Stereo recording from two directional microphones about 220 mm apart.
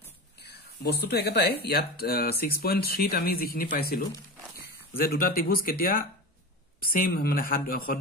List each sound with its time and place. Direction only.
0.4 s speech: 45° left (ahead or behind)